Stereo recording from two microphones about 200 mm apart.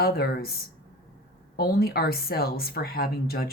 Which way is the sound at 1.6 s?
50° left (ahead or behind).